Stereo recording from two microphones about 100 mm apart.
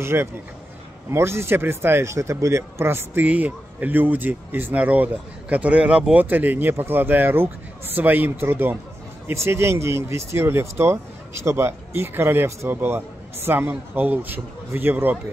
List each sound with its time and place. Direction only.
0.0 s speech: 25° right (ahead or behind)